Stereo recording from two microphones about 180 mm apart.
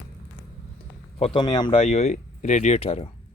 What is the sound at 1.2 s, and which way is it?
Speech, 25° left (ahead or behind).